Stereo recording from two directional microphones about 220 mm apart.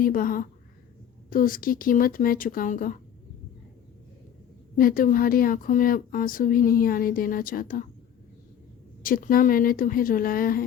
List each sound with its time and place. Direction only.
0.0 s speech: 40° left (ahead or behind)
4.8 s speech: 40° left (ahead or behind)
9.0 s speech: 40° left (ahead or behind)